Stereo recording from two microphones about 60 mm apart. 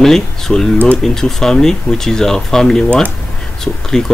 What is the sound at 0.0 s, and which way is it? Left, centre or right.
Speech, centre.